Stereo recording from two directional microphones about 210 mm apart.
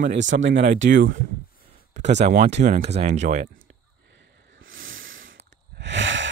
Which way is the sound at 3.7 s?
60° right (ahead or behind).